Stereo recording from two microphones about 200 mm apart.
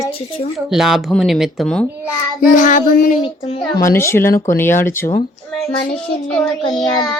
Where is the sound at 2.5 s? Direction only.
40° left (ahead or behind).